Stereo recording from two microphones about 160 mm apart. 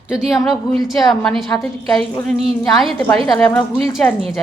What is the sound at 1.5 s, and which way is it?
Speech, 15° left (ahead or behind).